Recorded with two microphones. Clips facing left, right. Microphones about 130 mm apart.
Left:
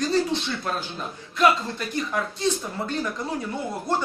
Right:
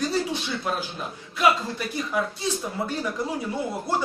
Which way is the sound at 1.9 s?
10° right (ahead or behind).